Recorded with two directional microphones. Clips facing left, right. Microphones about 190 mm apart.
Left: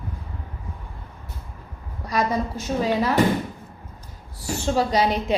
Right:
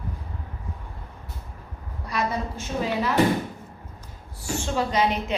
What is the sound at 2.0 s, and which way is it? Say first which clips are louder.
A woman's voice: left 4 dB; 40° left (ahead or behind).